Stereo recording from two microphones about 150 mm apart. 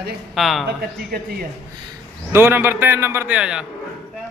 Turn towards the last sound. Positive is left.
turn(degrees=-5)  # may be behind; listen again after turning